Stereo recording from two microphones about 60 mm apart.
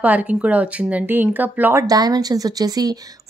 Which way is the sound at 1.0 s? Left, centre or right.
Right.